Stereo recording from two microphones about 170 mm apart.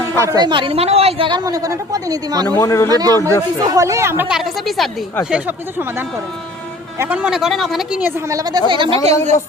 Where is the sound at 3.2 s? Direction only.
15° left (ahead or behind).